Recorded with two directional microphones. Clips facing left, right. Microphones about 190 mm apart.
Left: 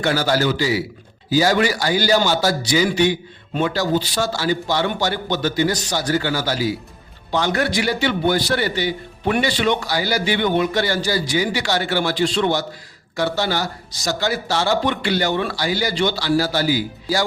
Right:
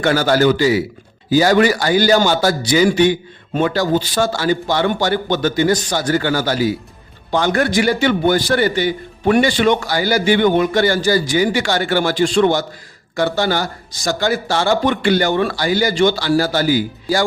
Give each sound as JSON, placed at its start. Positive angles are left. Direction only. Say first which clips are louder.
{"t": 0.0, "sound": "a man's voice", "louder": "right 5 dB", "side_deg": -55}